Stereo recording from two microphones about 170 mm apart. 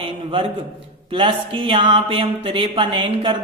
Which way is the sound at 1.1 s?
30° right (ahead or behind).